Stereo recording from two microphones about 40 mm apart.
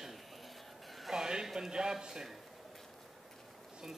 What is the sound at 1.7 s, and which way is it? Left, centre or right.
Speech, centre.